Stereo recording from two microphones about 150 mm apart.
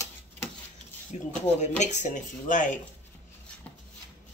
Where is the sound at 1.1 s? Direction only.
50° left (ahead or behind).